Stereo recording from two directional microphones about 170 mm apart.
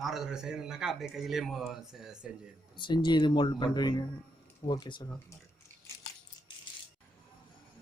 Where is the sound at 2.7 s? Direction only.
30° left (ahead or behind).